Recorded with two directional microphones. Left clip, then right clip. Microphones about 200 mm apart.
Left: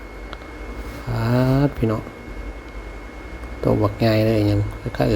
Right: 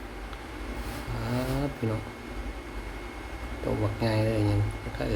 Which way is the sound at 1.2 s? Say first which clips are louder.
Left 12 dB; 35° left (ahead or behind).